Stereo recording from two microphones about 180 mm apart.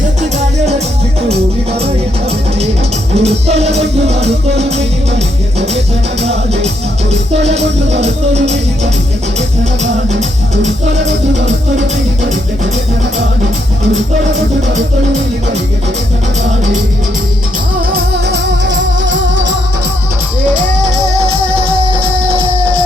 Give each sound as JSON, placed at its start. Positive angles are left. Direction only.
{"t": 3.2, "sound": "music", "side_deg": -35}
{"t": 6.2, "sound": "music", "side_deg": -35}
{"t": 17.9, "sound": "music", "side_deg": -75}